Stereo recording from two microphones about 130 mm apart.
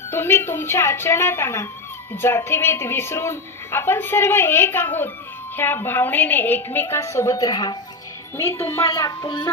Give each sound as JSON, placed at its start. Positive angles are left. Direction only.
{"t": 0.1, "sound": "a woman's voice", "side_deg": 20}
{"t": 8.4, "sound": "a woman's voice", "side_deg": 20}
{"t": 9.0, "sound": "speech", "side_deg": 35}